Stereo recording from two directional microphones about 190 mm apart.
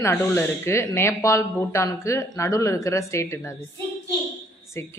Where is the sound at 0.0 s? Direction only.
15° left (ahead or behind).